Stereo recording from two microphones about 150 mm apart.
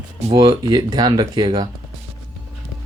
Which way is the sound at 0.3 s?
35° right (ahead or behind).